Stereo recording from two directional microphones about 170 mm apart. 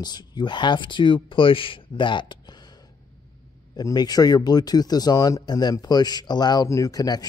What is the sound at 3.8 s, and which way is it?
Speech, 25° left (ahead or behind).